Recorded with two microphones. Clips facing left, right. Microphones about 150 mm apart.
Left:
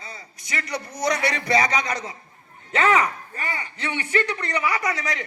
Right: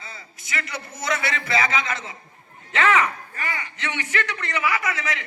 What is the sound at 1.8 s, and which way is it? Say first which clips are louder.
A man's voice: left 2 dB; 40° left (ahead or behind).